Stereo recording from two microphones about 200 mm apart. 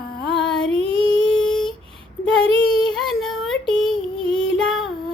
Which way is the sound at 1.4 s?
5° left (ahead or behind).